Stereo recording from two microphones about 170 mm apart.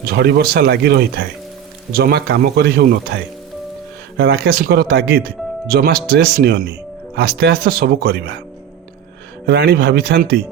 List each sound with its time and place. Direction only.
0.0 s speech: 70° right (ahead or behind)
4.2 s speech: 70° right (ahead or behind)
9.5 s speech: 70° right (ahead or behind)